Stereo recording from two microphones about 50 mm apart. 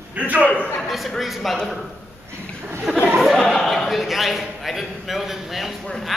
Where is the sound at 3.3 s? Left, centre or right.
Centre.